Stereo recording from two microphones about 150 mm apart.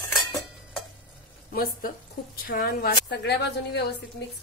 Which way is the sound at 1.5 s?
70° left (ahead or behind).